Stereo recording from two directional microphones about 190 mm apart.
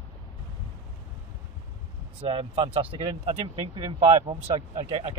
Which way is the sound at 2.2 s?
30° right (ahead or behind).